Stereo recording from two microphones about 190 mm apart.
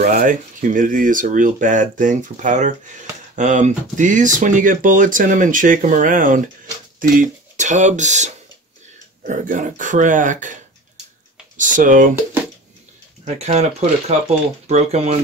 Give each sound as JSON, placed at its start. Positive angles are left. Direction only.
{"t": 0.0, "sound": "speech", "side_deg": -45}
{"t": 13.2, "sound": "speech", "side_deg": -35}